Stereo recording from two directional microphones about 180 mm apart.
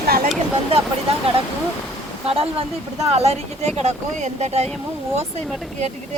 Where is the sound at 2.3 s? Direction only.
35° right (ahead or behind).